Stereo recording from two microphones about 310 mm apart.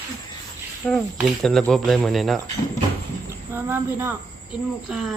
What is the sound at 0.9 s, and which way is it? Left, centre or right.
Speech, centre.